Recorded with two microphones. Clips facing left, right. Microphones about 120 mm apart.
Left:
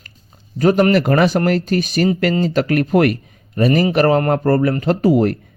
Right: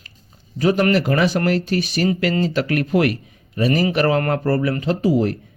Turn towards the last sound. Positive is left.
turn(degrees=55)  # may be behind; listen again after turning